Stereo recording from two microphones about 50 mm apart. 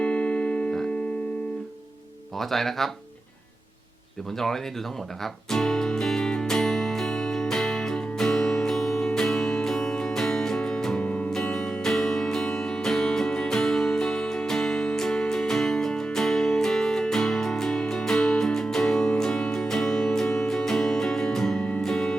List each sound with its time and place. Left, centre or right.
0.0 s keyboard: left
2.4 s speech: centre
4.4 s speech: centre
5.2 s music: centre
10.9 s music: left
11.3 s music: centre
18.9 s music: centre
21.6 s music: left